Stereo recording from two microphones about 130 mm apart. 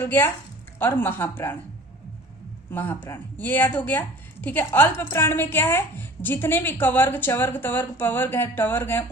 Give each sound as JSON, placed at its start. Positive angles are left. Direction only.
{"t": 0.0, "sound": "speech", "side_deg": 15}
{"t": 2.7, "sound": "speech", "side_deg": 15}